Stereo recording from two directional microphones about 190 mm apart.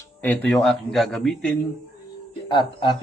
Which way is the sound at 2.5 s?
25° left (ahead or behind).